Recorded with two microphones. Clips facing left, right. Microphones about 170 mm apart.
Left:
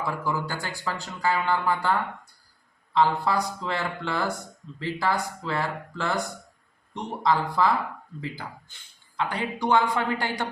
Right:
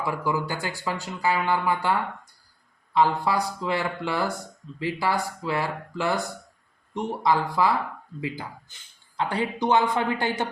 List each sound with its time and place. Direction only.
0.0 s speech: 15° right (ahead or behind)
9.1 s speech: 25° right (ahead or behind)